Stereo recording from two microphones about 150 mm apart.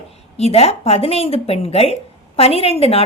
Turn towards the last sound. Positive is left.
turn(degrees=40)  # may be behind; listen again after turning